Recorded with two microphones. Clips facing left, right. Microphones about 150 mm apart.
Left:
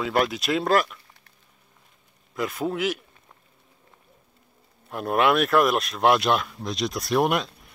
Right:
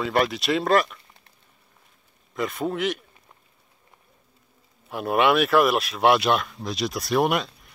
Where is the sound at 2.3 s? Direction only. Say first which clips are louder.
Even; centre (ahead or behind).